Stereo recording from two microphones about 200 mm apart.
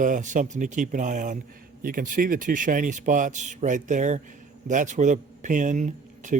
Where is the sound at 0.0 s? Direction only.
40° right (ahead or behind).